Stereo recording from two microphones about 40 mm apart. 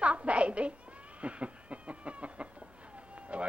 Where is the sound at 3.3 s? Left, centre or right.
Right.